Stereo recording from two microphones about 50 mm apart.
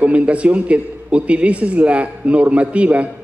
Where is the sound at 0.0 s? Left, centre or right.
Right.